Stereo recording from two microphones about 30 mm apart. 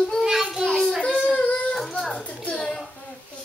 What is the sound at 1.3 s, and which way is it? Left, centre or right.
Yodeling, left.